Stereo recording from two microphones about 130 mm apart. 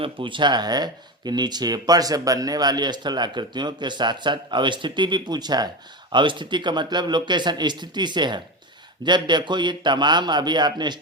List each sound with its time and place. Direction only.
0.0 s speech: 40° right (ahead or behind)